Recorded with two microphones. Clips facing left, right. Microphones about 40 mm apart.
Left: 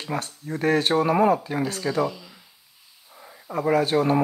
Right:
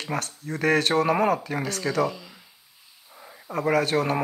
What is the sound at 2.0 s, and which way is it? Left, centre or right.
Speech, centre.